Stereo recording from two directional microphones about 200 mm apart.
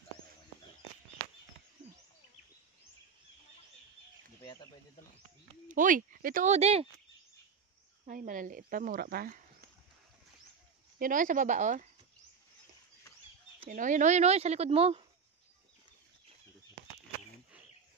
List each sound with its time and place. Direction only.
5.7 s speech: 40° right (ahead or behind)
8.1 s speech: 40° right (ahead or behind)
11.0 s speech: 40° right (ahead or behind)
13.7 s speech: 40° right (ahead or behind)